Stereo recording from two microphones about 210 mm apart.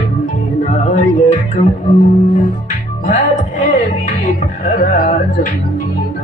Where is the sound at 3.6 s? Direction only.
35° left (ahead or behind).